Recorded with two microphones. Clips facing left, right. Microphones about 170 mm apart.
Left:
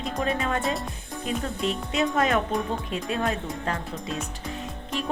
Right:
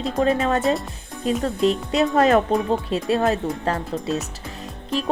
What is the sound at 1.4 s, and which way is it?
Speech, 35° right (ahead or behind).